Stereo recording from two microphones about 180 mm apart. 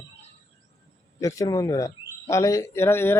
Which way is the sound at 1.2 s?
20° left (ahead or behind).